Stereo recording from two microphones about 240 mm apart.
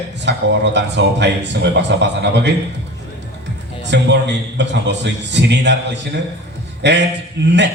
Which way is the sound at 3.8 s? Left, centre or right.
Right.